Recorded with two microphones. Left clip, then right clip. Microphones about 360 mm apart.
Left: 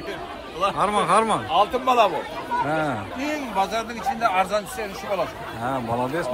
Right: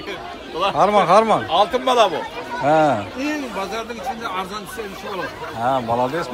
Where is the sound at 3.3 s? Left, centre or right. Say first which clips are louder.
Left 5 dB; left.